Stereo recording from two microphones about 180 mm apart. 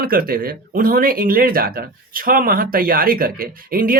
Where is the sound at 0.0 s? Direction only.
55° right (ahead or behind).